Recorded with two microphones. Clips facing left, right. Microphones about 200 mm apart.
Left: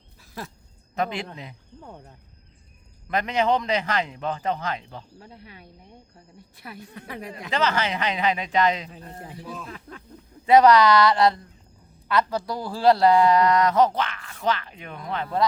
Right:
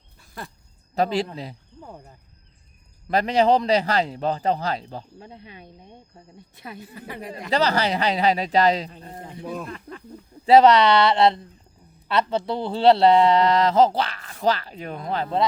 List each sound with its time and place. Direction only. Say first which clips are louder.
0.2 s a sound: left 1 dB; centre (ahead or behind)
0.9 s a man's voice: right 5 dB; 35° right (ahead or behind)
1.8 s speech: right 1 dB; 5° right (ahead or behind)
3.1 s a man's voice: right 4 dB; 35° right (ahead or behind)
5.2 s speech: right 3 dB; 20° right (ahead or behind)
6.7 s speech: even; 5° right (ahead or behind)
7.5 s a man's voice: right 3 dB; 35° right (ahead or behind)
9.4 s speech: right 7 dB; 55° right (ahead or behind)
9.6 s speech: right 4 dB; centre (ahead or behind)
10.4 s speech: right 1 dB; 30° right (ahead or behind)